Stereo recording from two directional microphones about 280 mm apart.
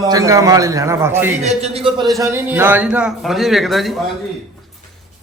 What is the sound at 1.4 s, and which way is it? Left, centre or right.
A man's voice, right.